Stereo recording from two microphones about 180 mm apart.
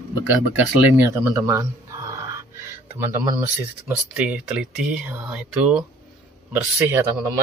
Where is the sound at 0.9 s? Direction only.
10° right (ahead or behind).